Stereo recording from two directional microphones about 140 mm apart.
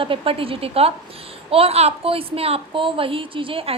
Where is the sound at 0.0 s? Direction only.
40° right (ahead or behind).